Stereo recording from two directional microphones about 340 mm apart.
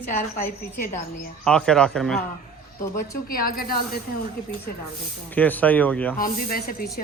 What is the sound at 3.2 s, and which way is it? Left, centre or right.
Speech, left.